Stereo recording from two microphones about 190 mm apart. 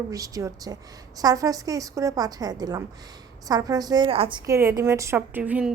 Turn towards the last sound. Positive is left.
turn(degrees=-5)  # may be behind; listen again after turning